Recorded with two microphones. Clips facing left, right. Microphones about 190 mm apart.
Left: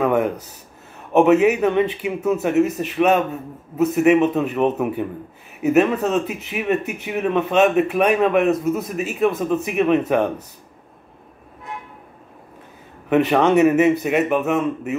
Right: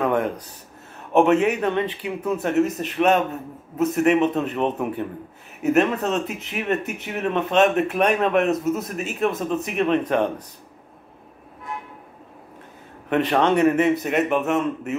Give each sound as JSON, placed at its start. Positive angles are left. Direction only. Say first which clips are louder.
{"t": 0.0, "sound": "speech", "louder": "left 3 dB", "side_deg": 10}
{"t": 13.1, "sound": "speech", "louder": "left 4 dB", "side_deg": 10}